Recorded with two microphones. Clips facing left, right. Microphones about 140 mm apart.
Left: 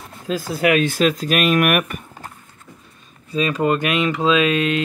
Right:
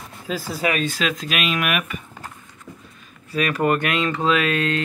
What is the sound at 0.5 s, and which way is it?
Speech, 55° left (ahead or behind).